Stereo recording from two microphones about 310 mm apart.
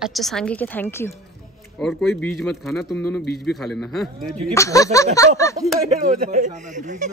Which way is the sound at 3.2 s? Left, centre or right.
Left.